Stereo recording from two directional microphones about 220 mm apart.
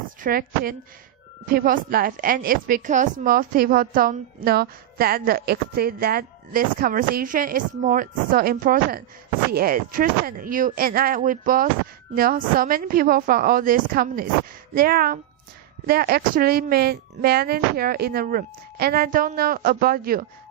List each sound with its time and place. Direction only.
0.2 s a woman's voice: 40° right (ahead or behind)